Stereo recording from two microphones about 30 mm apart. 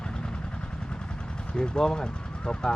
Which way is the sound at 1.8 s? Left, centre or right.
Centre.